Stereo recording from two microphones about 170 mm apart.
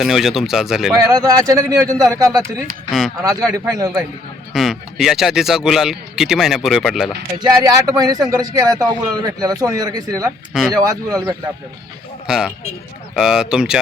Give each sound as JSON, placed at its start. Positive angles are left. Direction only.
{"t": 0.0, "sound": "speech", "side_deg": 0}
{"t": 0.9, "sound": "speech", "side_deg": -20}
{"t": 4.5, "sound": "speech", "side_deg": 0}
{"t": 7.3, "sound": "speech", "side_deg": -25}
{"t": 12.3, "sound": "speech", "side_deg": -5}